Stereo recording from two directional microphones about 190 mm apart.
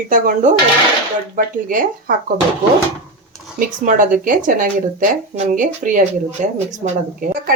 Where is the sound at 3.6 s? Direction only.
45° right (ahead or behind).